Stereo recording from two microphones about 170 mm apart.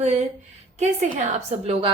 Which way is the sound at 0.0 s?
45° right (ahead or behind).